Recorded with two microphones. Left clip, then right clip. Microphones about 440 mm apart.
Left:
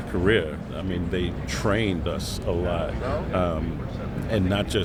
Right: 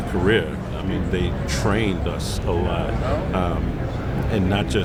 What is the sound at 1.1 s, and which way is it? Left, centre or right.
Speech, left.